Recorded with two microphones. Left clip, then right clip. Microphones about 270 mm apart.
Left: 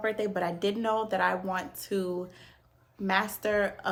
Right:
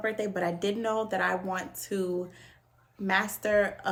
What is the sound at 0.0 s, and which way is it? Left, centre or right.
Speech, centre.